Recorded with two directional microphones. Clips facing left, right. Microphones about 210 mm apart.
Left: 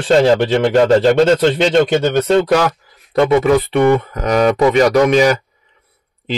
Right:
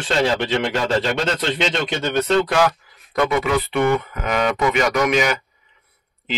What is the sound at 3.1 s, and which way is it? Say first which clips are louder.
Speech: left 7 dB; 30° left (ahead or behind).